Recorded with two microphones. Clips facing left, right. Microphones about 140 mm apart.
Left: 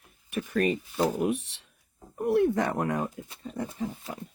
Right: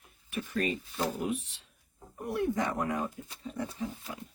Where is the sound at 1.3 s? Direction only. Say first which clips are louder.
Left 4 dB; 75° left (ahead or behind).